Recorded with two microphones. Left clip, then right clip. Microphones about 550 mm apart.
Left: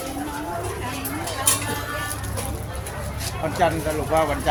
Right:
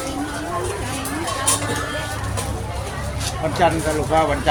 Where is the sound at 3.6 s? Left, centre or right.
Left.